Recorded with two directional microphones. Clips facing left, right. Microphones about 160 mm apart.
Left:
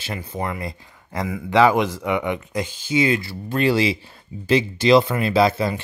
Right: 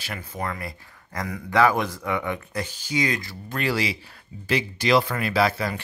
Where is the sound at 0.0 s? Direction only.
30° left (ahead or behind).